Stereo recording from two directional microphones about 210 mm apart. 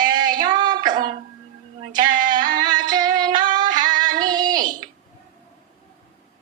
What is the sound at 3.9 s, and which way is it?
Female singing, 40° right (ahead or behind).